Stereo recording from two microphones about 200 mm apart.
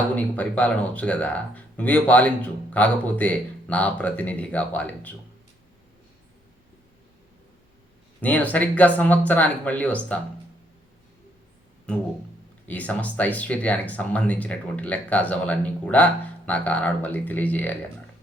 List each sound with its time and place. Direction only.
0.3 s speech: 5° left (ahead or behind)
8.2 s speech: 5° left (ahead or behind)
11.9 s a sound: 5° left (ahead or behind)
12.6 s speech: 5° left (ahead or behind)